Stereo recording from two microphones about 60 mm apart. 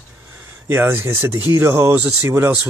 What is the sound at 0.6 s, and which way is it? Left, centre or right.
Speech, right.